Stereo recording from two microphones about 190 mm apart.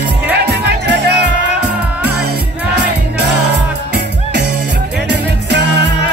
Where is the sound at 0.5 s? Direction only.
65° right (ahead or behind).